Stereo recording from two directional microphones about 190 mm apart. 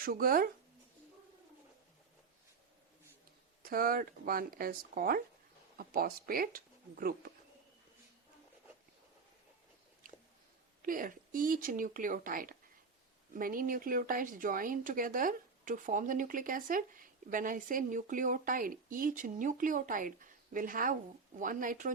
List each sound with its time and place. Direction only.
0.0 s speech: 50° right (ahead or behind)
3.6 s speech: 50° right (ahead or behind)
10.8 s speech: 45° right (ahead or behind)